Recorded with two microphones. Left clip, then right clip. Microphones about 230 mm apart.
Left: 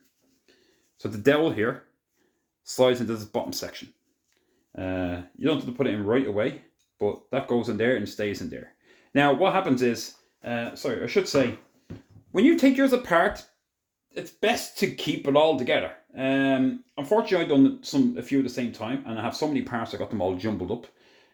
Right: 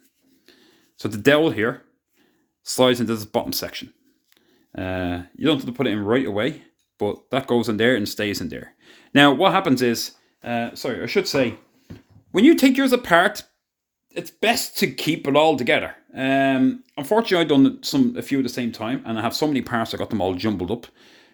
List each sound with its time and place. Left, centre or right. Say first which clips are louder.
0.9 s speech: right 5 dB; right
4.7 s speech: right 4 dB; right